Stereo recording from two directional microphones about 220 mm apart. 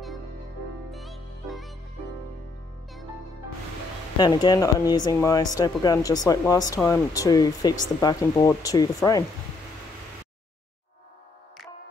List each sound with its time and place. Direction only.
0.9 s music: centre (ahead or behind)
4.2 s speech: 20° left (ahead or behind)